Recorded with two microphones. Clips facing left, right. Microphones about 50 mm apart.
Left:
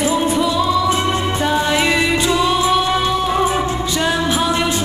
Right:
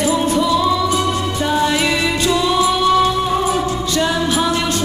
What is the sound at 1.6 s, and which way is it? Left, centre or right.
Music, left.